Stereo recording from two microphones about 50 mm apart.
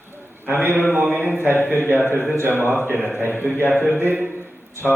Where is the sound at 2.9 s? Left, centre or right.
Right.